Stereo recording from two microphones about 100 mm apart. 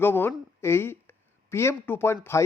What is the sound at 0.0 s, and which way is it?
A man's voice, 20° left (ahead or behind).